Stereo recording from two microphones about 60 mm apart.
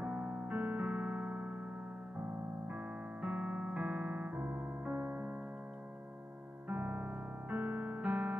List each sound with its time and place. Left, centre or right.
0.0 s keyboard: right
2.7 s keyboard: right
4.9 s music: right
6.7 s music: right